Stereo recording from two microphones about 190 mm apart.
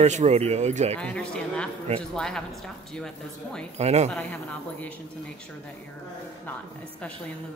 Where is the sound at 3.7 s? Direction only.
35° right (ahead or behind).